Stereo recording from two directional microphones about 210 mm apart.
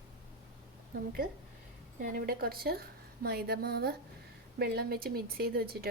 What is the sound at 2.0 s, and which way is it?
A woman's voice, 45° right (ahead or behind).